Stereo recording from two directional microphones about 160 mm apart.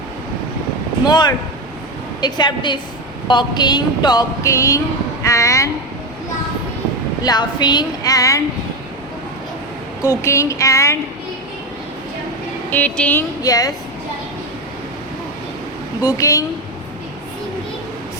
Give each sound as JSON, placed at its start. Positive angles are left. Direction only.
{"t": 1.0, "sound": "speech", "side_deg": 25}
{"t": 7.2, "sound": "speech", "side_deg": 25}
{"t": 10.0, "sound": "speech", "side_deg": 20}
{"t": 12.7, "sound": "speech", "side_deg": 10}
{"t": 13.4, "sound": "speech", "side_deg": 20}
{"t": 16.0, "sound": "speech", "side_deg": 20}